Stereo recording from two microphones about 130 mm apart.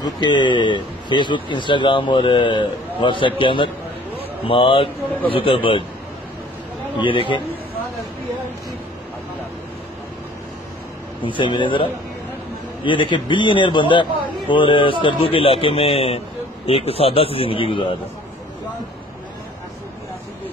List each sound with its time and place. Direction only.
0.0 s speech: 35° left (ahead or behind)
7.0 s speech: 40° left (ahead or behind)
11.2 s speech: 40° left (ahead or behind)